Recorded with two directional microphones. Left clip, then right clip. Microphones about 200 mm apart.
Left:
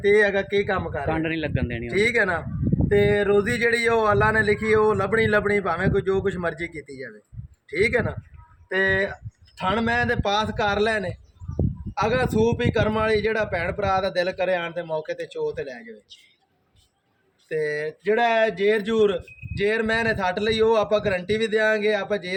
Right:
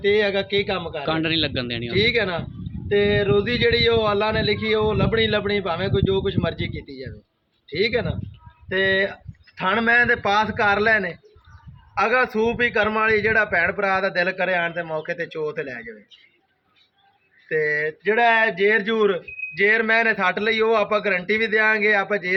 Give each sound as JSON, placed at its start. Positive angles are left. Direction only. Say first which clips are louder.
{"t": 0.0, "sound": "speech", "louder": "left 1 dB", "side_deg": 10}
{"t": 0.7, "sound": "a man's voice", "louder": "right 1 dB", "side_deg": -10}
{"t": 2.0, "sound": "speech", "louder": "even", "side_deg": 10}
{"t": 2.9, "sound": "a man's voice", "louder": "right 1 dB", "side_deg": -5}
{"t": 3.3, "sound": "speech", "louder": "right 1 dB", "side_deg": 10}
{"t": 4.3, "sound": "a man's voice", "louder": "left 2 dB", "side_deg": -5}
{"t": 4.6, "sound": "speech", "louder": "left 1 dB", "side_deg": 10}
{"t": 6.8, "sound": "a man's voice", "louder": "even", "side_deg": -5}
{"t": 7.8, "sound": "speech", "louder": "even", "side_deg": 15}
{"t": 17.5, "sound": "speech", "louder": "right 4 dB", "side_deg": 5}